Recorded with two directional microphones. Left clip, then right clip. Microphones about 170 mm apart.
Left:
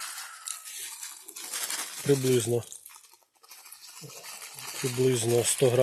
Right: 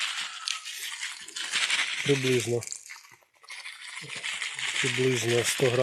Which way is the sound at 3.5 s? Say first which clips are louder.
Right 10 dB; 45° left (ahead or behind).